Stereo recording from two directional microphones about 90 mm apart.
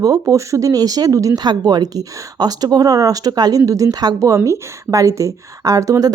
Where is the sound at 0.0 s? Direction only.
40° right (ahead or behind).